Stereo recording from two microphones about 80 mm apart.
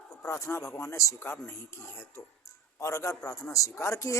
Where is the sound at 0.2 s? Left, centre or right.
Left.